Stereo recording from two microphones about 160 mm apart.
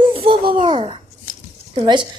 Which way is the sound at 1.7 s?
30° right (ahead or behind).